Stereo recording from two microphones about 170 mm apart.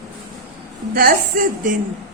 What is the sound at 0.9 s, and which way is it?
Speech, 60° right (ahead or behind).